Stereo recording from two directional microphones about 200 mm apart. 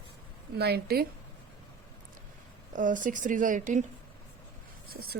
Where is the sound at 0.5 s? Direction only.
55° right (ahead or behind).